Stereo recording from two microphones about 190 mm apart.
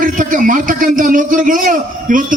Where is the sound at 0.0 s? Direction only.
45° right (ahead or behind).